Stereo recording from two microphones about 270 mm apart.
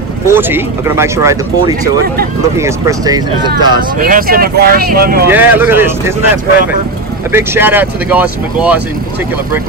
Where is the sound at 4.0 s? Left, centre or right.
Right.